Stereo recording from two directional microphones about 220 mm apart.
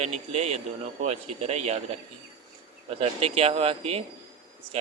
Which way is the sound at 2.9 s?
25° right (ahead or behind).